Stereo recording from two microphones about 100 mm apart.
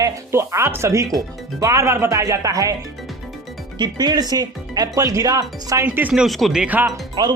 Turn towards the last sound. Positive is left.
turn(degrees=-45)  # may be behind; listen again after turning